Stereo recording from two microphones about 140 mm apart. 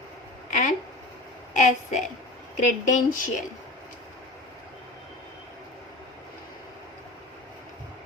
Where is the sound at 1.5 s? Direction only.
60° left (ahead or behind).